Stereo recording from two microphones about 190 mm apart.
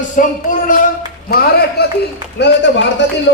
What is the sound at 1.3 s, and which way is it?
Speech, 55° left (ahead or behind).